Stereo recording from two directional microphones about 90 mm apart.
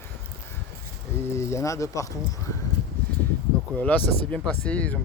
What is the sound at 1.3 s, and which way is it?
Speech, 30° left (ahead or behind).